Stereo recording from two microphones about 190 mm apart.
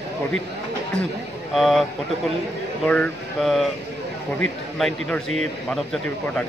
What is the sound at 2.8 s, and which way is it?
A man's voice, 5° left (ahead or behind).